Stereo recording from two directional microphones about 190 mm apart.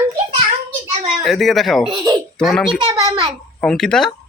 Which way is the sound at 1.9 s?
20° right (ahead or behind).